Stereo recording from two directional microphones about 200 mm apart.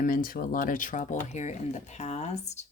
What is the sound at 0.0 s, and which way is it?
Speech, 45° left (ahead or behind).